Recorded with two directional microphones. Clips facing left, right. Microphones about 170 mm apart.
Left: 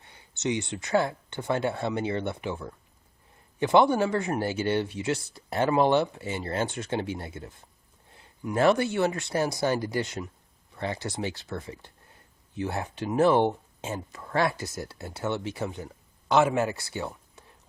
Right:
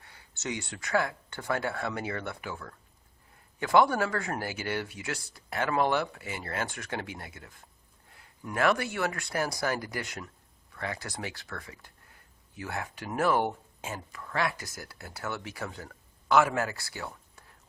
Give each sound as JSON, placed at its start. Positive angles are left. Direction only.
{"t": 0.0, "sound": "speech", "side_deg": 20}
{"t": 8.5, "sound": "a man's voice", "side_deg": 30}